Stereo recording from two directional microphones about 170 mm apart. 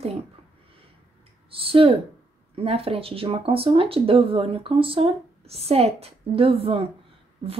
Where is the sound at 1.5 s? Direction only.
35° right (ahead or behind).